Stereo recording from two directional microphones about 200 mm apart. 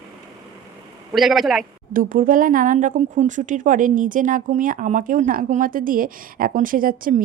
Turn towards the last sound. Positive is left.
turn(degrees=-45)  # may be behind; listen again after turning